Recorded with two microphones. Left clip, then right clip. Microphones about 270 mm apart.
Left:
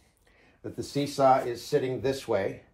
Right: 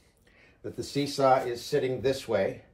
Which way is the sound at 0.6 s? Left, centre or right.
Centre.